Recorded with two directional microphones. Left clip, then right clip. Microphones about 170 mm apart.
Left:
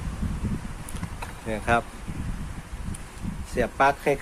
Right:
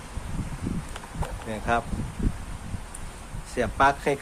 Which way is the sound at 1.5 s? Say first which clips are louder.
Left 2 dB; 20° left (ahead or behind).